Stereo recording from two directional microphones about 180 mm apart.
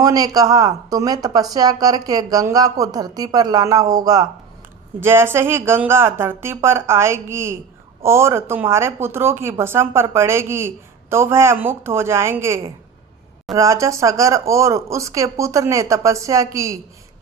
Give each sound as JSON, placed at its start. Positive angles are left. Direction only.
{"t": 0.0, "sound": "a woman's voice", "side_deg": -20}
{"t": 13.6, "sound": "speech", "side_deg": -15}